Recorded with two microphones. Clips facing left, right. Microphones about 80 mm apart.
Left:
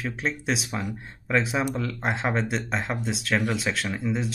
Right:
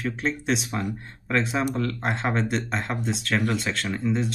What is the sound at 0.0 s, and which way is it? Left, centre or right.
Speech, centre.